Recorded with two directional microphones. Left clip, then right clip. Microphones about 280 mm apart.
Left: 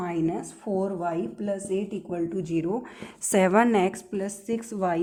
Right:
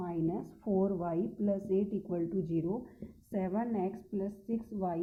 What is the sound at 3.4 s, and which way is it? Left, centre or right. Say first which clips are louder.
A woman's voice: left 15 dB; left.